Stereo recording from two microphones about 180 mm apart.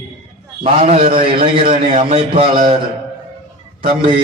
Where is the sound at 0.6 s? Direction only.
35° right (ahead or behind).